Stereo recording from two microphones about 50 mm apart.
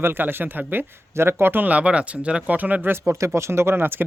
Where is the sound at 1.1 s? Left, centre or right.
Right.